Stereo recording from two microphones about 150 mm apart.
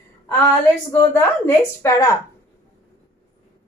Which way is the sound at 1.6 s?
20° left (ahead or behind).